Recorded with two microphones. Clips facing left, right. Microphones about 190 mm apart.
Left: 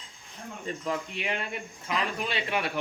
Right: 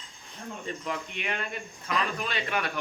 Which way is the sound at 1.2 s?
25° left (ahead or behind).